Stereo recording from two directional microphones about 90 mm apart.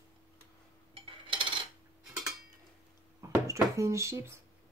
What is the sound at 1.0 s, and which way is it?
Coin, 85° right.